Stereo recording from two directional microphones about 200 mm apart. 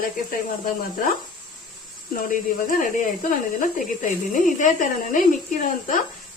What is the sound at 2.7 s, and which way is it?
Speech, 40° left (ahead or behind).